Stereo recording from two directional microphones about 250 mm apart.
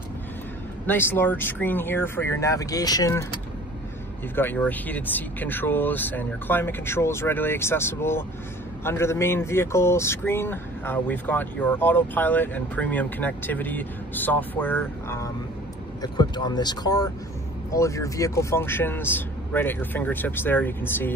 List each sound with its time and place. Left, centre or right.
0.8 s speech: centre
4.4 s speech: centre